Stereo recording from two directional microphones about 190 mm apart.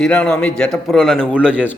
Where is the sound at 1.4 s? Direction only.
5° right (ahead or behind).